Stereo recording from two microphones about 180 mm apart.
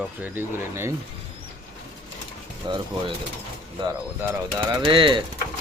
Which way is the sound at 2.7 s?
25° right (ahead or behind).